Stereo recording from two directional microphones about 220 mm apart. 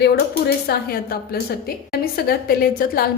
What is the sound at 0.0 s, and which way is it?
Speech, 45° left (ahead or behind).